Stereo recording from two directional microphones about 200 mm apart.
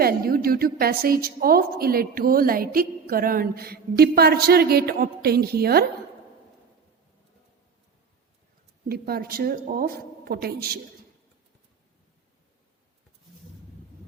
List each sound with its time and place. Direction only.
0.0 s a woman's voice: 50° right (ahead or behind)
8.9 s a woman's voice: 50° right (ahead or behind)